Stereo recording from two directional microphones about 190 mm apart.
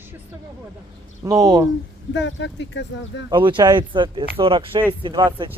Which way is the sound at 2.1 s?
70° left (ahead or behind).